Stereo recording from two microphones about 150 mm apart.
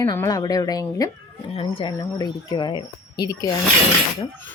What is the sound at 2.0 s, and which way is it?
Speech, 25° left (ahead or behind).